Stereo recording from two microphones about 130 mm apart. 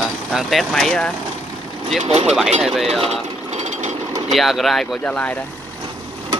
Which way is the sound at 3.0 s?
60° right (ahead or behind).